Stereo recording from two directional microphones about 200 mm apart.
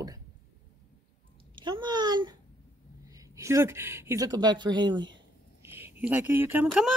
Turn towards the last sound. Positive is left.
turn(degrees=0)  # may be behind; listen again after turning